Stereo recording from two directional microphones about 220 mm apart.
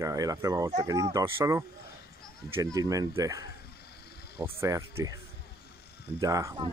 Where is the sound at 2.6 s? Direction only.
15° right (ahead or behind).